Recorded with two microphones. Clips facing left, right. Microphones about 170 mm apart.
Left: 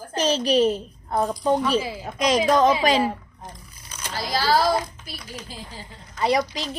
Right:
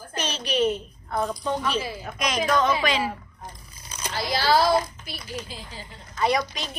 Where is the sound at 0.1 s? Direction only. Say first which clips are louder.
Left 8 dB; 35° left (ahead or behind).